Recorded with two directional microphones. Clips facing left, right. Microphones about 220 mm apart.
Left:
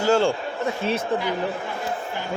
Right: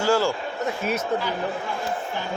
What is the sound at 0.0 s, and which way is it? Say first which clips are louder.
Speech: left 2 dB; 25° left (ahead or behind).